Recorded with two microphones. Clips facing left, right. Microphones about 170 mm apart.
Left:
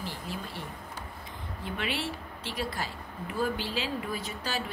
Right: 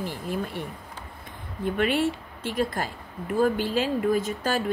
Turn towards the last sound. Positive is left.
turn(degrees=-50)  # may be behind; listen again after turning